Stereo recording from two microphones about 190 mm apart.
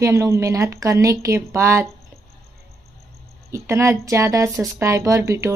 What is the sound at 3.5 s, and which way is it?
A woman's voice, 15° right (ahead or behind).